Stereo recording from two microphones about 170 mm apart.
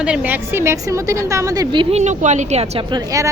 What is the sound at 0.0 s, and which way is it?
A woman's voice, 5° right (ahead or behind).